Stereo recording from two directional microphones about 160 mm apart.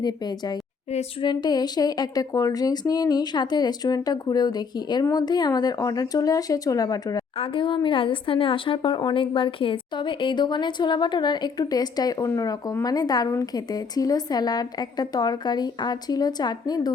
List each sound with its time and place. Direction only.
0.0 s speech: 25° left (ahead or behind)
7.3 s speech: 35° left (ahead or behind)